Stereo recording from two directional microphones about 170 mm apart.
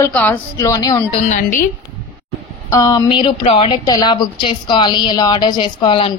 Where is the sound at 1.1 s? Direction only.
45° left (ahead or behind).